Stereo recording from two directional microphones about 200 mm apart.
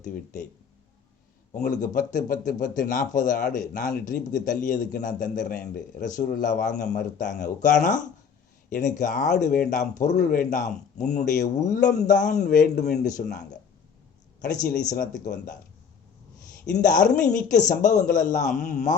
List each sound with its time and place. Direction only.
0.0 s speech: 40° left (ahead or behind)
1.5 s speech: 40° left (ahead or behind)
14.9 s speech: 45° left (ahead or behind)
16.8 s speech: 40° left (ahead or behind)